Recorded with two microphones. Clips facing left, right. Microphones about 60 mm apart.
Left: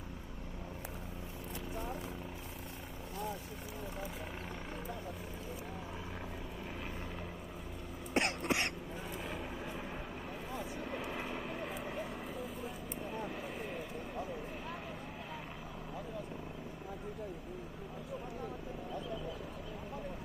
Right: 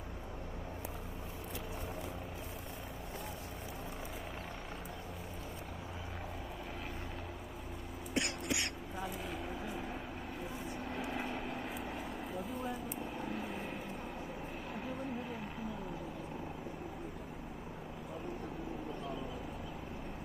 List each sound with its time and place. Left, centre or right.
8.1 s cough: left
11.1 s vehicle: centre